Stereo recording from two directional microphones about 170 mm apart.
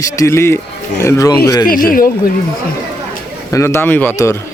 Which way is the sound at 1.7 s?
55° left (ahead or behind).